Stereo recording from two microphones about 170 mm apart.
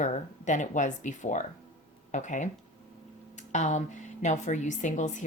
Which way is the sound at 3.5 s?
45° left (ahead or behind).